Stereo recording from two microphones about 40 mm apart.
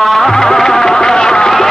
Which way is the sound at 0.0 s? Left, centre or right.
Centre.